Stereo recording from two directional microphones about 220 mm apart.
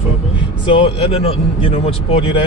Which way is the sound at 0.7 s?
25° left (ahead or behind).